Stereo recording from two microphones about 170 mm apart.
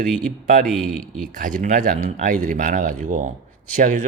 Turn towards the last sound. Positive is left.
turn(degrees=-50)  # may be behind; listen again after turning